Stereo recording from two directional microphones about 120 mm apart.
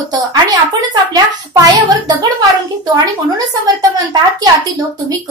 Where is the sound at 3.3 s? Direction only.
30° right (ahead or behind).